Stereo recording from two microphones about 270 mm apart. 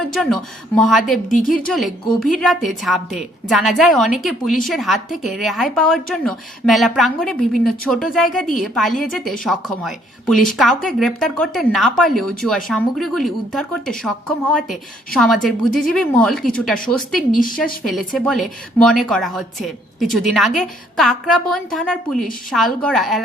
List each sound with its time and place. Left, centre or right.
0.0 s a woman's voice: centre
1.3 s a woman's voice: left
1.7 s a woman's voice: centre